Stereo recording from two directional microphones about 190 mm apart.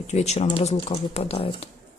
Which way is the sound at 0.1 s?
35° left (ahead or behind).